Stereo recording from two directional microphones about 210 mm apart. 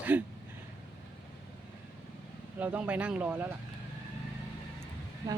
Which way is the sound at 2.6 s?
5° right (ahead or behind).